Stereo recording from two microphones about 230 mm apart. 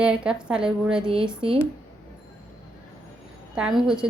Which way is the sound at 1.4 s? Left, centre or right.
Right.